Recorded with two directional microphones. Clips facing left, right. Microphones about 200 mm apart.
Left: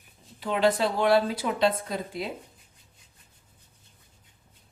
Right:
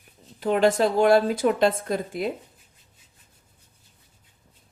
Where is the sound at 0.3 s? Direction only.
45° right (ahead or behind).